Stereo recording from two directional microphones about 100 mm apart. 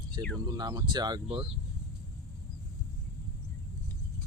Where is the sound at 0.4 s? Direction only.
40° right (ahead or behind).